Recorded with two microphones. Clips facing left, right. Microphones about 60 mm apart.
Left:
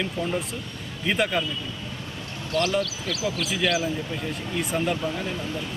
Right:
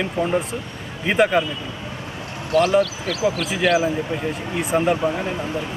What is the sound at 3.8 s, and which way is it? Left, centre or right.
Speech, right.